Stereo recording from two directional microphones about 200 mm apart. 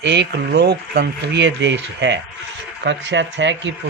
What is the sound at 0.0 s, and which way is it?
Speech, 60° right (ahead or behind).